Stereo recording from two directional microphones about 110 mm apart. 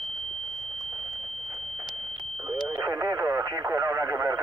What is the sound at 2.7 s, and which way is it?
Radio, 35° right (ahead or behind).